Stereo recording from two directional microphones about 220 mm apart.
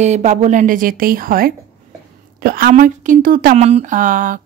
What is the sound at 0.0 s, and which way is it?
Speech, 30° right (ahead or behind).